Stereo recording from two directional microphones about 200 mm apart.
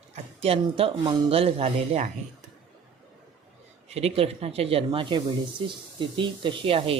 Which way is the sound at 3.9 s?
30° right (ahead or behind).